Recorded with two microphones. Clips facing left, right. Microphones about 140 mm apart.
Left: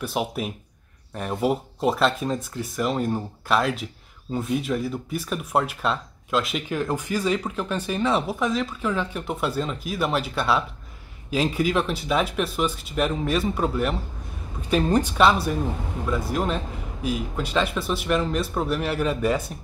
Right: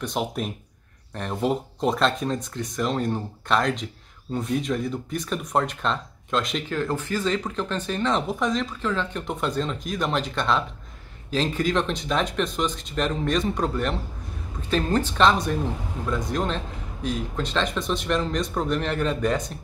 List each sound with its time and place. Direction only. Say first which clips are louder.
0.0 s speech: left 1 dB; 5° left (ahead or behind)